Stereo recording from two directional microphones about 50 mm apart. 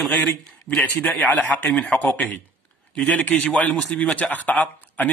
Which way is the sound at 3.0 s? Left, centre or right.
Left.